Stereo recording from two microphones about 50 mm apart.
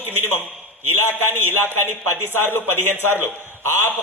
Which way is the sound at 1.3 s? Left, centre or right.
Right.